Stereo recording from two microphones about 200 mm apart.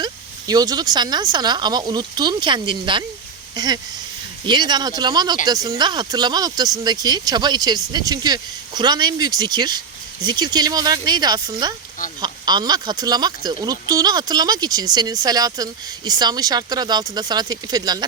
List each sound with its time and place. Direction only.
0.0 s speech: 20° right (ahead or behind)